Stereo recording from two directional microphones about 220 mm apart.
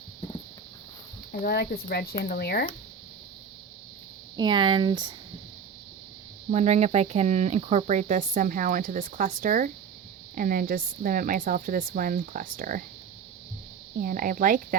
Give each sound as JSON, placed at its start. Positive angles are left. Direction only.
{"t": 1.3, "sound": "speech", "side_deg": 45}
{"t": 4.4, "sound": "speech", "side_deg": -20}
{"t": 6.5, "sound": "speech", "side_deg": -30}
{"t": 14.0, "sound": "speech", "side_deg": -40}